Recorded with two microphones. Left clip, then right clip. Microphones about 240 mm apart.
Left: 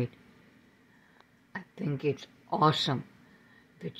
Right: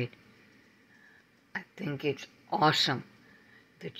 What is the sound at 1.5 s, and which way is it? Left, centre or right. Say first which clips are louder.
Speech: even; centre.